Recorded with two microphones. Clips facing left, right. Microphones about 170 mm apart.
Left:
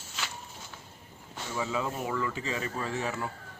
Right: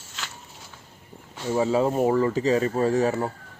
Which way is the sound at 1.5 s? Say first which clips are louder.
Right 11 dB; 40° right (ahead or behind).